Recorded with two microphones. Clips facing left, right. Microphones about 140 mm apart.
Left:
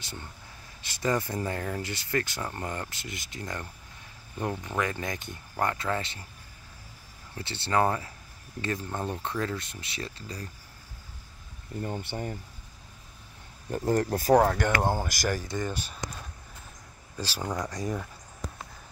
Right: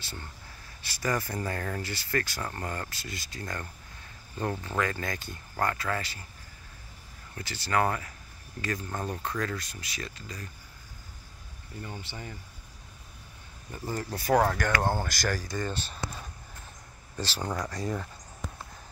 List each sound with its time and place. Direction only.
0.0 s speech: 20° left (ahead or behind)
7.3 s speech: 30° left (ahead or behind)
11.8 s speech: 50° left (ahead or behind)
13.7 s speech: 65° left (ahead or behind); by 14.3 s 45° left (ahead or behind)
14.3 s speech: 15° left (ahead or behind)
17.2 s speech: 10° left (ahead or behind)